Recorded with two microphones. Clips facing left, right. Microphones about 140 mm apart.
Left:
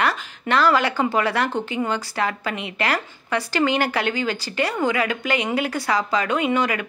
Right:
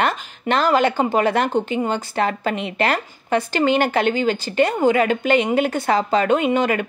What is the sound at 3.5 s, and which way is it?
Speech, 25° right (ahead or behind).